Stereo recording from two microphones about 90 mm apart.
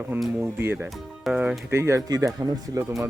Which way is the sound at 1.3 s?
Centre (ahead or behind).